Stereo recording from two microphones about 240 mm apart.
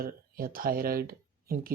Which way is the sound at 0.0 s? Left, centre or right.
Right.